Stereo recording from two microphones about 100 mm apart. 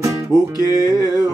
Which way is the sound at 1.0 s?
40° left (ahead or behind).